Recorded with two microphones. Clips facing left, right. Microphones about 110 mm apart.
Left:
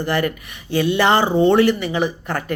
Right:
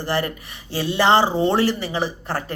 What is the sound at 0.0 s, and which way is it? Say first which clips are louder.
Speech: left 3 dB; 30° right (ahead or behind).